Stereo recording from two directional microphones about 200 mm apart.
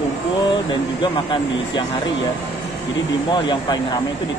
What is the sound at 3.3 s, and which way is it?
Speech, 20° left (ahead or behind).